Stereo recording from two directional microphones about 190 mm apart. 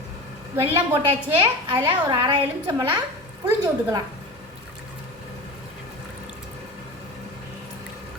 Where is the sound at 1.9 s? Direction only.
25° right (ahead or behind).